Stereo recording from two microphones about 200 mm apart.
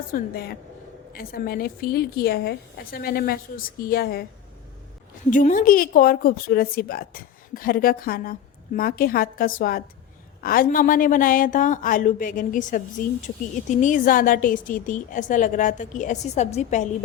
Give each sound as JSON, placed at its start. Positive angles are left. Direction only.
{"t": 0.1, "sound": "a woman's voice", "side_deg": 50}
{"t": 5.3, "sound": "a woman's voice", "side_deg": 40}